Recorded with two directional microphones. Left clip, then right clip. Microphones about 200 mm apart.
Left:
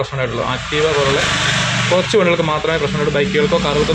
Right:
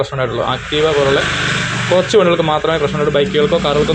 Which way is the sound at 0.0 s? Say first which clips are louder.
Right 3 dB; 5° right (ahead or behind).